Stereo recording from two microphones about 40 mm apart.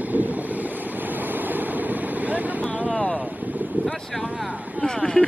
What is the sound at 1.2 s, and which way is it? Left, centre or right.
Vehicle, right.